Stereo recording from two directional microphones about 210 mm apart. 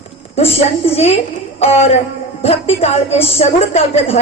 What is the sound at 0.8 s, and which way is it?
A woman's voice, 30° left (ahead or behind).